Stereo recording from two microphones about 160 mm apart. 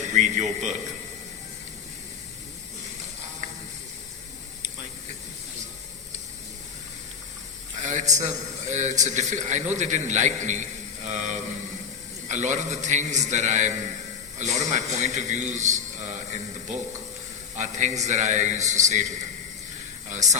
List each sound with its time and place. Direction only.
0.1 s a man's voice: 45° right (ahead or behind)
7.8 s a man's voice: 50° right (ahead or behind)
20.1 s speech: 45° right (ahead or behind)